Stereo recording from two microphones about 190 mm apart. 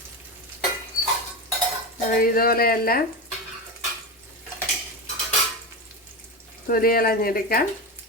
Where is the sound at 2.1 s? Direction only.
50° left (ahead or behind).